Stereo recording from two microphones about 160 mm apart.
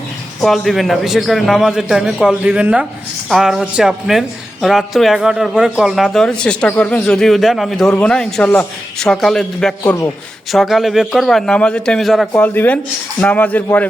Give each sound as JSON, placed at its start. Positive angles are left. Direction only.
{"t": 0.4, "sound": "speech", "side_deg": 0}